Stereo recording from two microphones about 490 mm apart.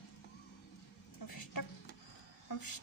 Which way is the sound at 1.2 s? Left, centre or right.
Left.